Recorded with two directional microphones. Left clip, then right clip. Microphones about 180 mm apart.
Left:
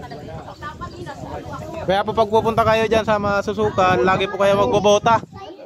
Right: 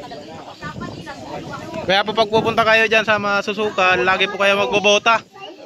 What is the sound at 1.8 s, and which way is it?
A man's voice, 15° left (ahead or behind).